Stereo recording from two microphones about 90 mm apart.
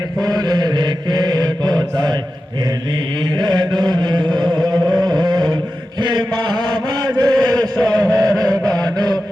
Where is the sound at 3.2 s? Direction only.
50° right (ahead or behind).